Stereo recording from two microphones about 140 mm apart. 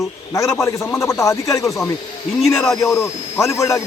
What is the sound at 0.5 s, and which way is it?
Speech, 15° left (ahead or behind).